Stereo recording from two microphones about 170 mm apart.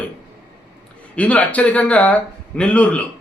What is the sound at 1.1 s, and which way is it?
A man's voice, 10° left (ahead or behind).